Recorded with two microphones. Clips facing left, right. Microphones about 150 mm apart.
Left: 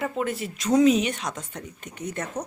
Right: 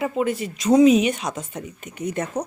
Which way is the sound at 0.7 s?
10° right (ahead or behind).